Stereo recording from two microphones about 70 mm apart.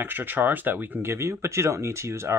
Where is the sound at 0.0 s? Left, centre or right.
Right.